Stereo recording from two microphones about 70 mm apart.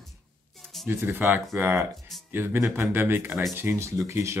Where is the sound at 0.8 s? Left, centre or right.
Right.